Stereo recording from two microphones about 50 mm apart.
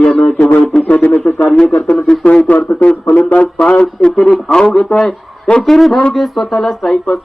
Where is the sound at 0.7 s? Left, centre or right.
Left.